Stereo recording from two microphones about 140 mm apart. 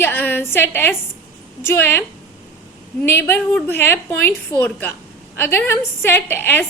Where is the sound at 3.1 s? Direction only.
15° left (ahead or behind).